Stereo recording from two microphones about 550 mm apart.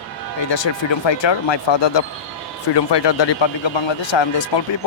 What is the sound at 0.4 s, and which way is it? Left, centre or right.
Speech, left.